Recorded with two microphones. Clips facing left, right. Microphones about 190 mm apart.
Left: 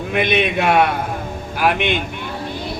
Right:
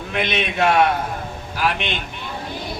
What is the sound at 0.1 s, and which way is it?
A man's voice, 55° left (ahead or behind).